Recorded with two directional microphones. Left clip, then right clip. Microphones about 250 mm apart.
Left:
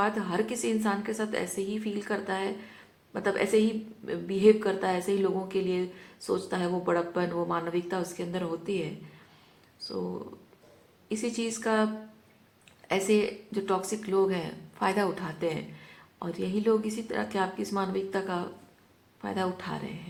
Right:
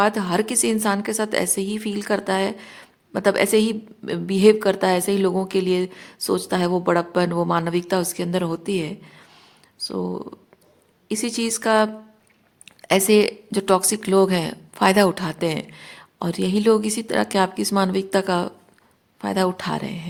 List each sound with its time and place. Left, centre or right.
0.0 s a woman's voice: right
11.1 s a woman's voice: right